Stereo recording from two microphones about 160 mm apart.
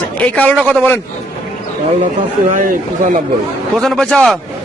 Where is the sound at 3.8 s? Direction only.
Centre (ahead or behind).